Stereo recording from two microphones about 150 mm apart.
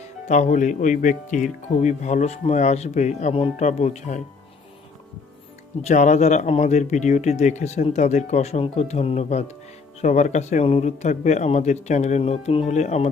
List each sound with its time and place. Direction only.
0.3 s speech: 55° left (ahead or behind)
5.8 s speech: 55° left (ahead or behind)